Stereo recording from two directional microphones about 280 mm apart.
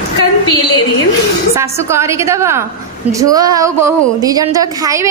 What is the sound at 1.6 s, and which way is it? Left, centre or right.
Speech, centre.